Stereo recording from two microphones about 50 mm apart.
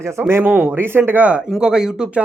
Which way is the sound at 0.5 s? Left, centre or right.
Right.